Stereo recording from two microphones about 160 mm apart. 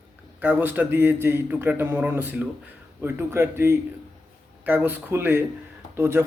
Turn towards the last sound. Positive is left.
turn(degrees=-15)  # may be behind; listen again after turning